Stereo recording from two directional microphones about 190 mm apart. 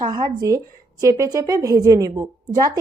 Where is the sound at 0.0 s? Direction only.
20° right (ahead or behind).